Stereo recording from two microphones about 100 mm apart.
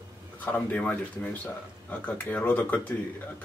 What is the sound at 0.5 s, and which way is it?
Speech, 15° left (ahead or behind).